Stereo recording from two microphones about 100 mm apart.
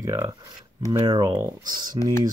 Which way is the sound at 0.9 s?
45° right (ahead or behind).